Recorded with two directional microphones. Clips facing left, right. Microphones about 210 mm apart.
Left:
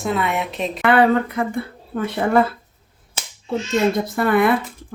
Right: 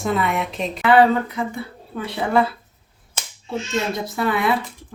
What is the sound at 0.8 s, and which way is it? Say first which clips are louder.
Speech: even; 55° left (ahead or behind).